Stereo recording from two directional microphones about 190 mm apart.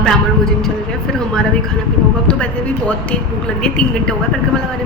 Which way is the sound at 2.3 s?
5° left (ahead or behind).